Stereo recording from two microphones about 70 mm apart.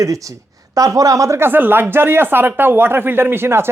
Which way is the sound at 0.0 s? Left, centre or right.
Right.